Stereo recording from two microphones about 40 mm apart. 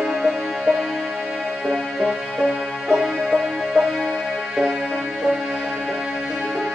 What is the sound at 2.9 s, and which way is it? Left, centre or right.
Music, centre.